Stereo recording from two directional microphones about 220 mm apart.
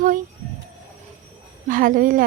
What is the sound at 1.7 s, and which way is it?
Speech, 40° right (ahead or behind).